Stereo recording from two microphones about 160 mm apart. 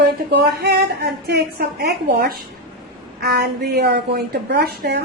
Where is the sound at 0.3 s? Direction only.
90° right; by 2.4 s 70° right (ahead or behind).